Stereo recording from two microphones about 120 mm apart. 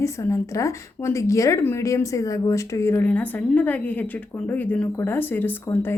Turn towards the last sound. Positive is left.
turn(degrees=20)  # may be behind; listen again after turning